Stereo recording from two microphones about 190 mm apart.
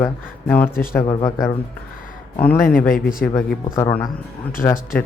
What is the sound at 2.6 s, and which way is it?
Speech, 45° left (ahead or behind).